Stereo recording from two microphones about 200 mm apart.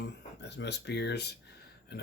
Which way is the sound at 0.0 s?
60° left (ahead or behind).